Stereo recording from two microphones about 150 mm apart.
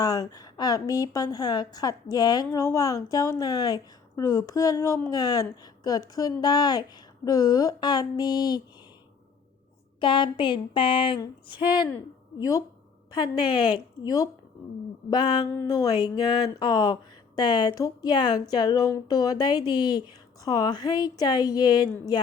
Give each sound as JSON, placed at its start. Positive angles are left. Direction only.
{"t": 0.0, "sound": "a woman's voice", "side_deg": 25}
{"t": 10.0, "sound": "a woman's voice", "side_deg": 35}